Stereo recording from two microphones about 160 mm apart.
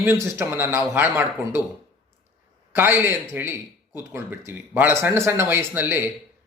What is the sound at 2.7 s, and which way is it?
A man's voice, 15° right (ahead or behind).